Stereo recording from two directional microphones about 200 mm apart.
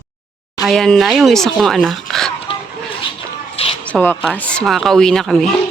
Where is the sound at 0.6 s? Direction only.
Centre (ahead or behind).